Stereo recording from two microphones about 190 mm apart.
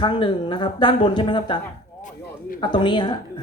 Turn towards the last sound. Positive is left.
turn(degrees=25)  # may be behind; listen again after turning